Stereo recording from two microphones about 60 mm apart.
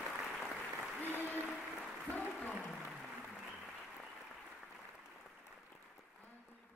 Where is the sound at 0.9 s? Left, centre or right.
Left.